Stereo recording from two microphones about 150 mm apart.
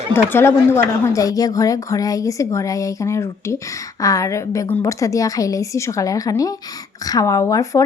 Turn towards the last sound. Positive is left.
turn(degrees=20)  # may be behind; listen again after turning